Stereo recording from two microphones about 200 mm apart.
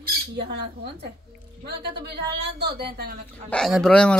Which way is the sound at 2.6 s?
55° right (ahead or behind).